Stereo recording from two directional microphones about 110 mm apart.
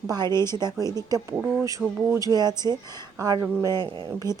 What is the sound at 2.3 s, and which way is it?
Speech, 40° right (ahead or behind).